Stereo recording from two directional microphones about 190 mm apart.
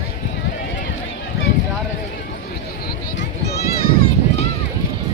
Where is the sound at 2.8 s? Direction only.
60° left (ahead or behind).